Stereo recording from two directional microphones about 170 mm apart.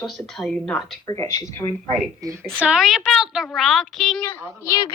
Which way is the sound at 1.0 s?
15° left (ahead or behind).